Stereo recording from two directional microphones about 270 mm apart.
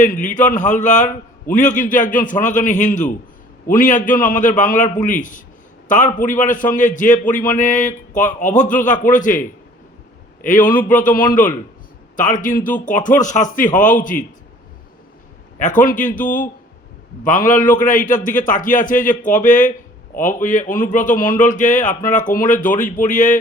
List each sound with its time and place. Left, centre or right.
0.0 s a man's voice: left
15.5 s a man's voice: left